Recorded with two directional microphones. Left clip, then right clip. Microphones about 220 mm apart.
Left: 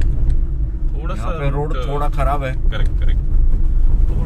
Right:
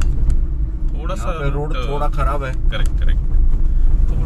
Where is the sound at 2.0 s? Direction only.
25° left (ahead or behind).